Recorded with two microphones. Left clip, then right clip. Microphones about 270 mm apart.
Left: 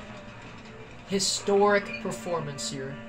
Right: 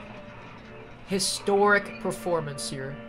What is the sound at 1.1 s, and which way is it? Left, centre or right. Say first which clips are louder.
Speech: even; right.